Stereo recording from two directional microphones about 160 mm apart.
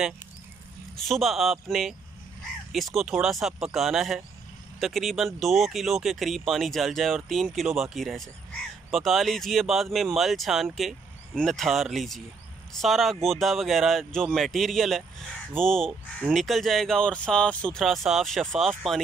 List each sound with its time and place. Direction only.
0.9 s speech: centre (ahead or behind)